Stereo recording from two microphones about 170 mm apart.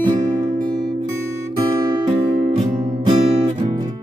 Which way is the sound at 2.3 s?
50° right (ahead or behind).